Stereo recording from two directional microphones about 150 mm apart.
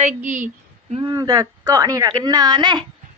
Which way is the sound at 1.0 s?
25° right (ahead or behind).